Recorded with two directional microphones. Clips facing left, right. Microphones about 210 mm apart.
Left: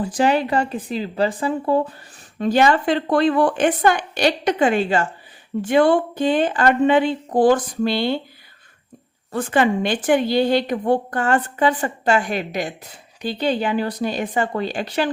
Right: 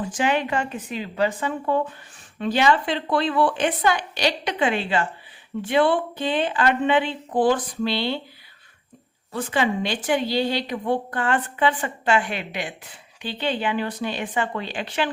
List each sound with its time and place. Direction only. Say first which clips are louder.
0.0 s a woman's voice: left 5 dB; 35° left (ahead or behind)
9.3 s a woman's voice: left 5 dB; 50° left (ahead or behind)